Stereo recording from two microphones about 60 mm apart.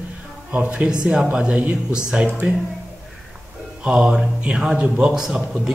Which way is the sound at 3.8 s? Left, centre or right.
Centre.